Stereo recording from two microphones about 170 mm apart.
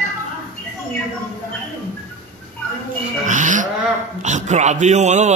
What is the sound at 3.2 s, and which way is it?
Livestock, 45° right (ahead or behind).